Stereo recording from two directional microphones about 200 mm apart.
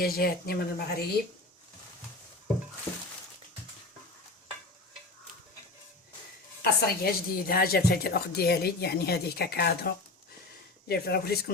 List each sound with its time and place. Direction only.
0.0 s a woman's voice: 50° left (ahead or behind)
6.6 s a woman's voice: 50° left (ahead or behind)